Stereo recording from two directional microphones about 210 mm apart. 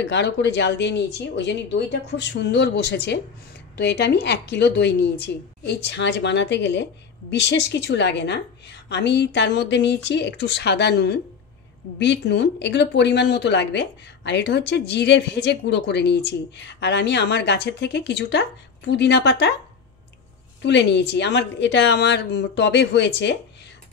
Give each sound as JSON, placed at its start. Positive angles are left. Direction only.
{"t": 0.0, "sound": "speech", "side_deg": 55}
{"t": 20.6, "sound": "speech", "side_deg": 55}